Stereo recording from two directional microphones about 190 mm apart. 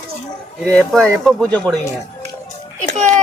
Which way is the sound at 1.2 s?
5° left (ahead or behind).